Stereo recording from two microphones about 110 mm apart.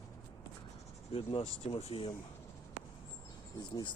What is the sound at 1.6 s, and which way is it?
Speech, 70° left (ahead or behind).